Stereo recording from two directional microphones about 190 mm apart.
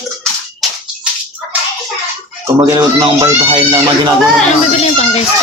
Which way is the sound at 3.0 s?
20° right (ahead or behind).